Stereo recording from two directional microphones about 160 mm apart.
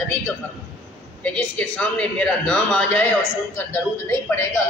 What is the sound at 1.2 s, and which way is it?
A man's voice, 10° left (ahead or behind).